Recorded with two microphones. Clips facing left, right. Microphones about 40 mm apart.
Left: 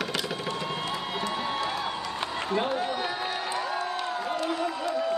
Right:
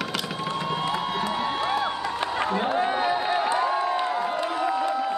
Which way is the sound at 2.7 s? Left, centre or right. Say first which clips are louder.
Right 5 dB; right.